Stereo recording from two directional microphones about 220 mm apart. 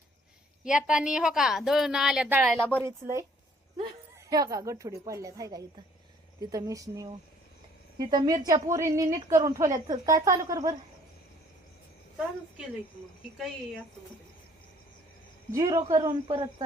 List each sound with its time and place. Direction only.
0.6 s a woman's voice: 5° right (ahead or behind)
2.6 s a woman's voice: 5° left (ahead or behind)
2.8 s a woman's voice: 15° right (ahead or behind)
4.3 s a woman's voice: 15° right (ahead or behind)
13.3 s a woman's voice: centre (ahead or behind)
15.5 s speech: 15° right (ahead or behind)